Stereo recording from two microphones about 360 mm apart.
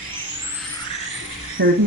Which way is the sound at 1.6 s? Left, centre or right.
Right.